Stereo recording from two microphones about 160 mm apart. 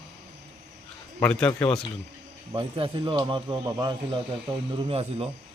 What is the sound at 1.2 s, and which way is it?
Speech, 5° left (ahead or behind).